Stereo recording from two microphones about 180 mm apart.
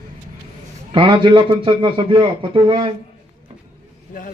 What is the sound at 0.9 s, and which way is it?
A man's voice, 25° right (ahead or behind).